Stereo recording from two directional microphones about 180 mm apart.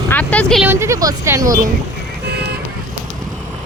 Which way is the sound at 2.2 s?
65° right (ahead or behind).